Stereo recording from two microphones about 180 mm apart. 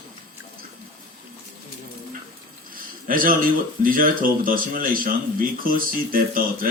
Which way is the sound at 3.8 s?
50° right (ahead or behind).